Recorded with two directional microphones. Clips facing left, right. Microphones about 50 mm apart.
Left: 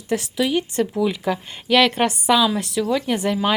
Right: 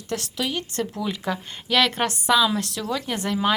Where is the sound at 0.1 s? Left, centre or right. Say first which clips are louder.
Left 7 dB; centre.